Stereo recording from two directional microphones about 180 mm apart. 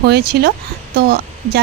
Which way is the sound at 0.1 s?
65° right (ahead or behind).